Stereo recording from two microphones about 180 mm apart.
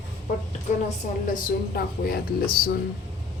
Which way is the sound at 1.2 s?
55° left (ahead or behind).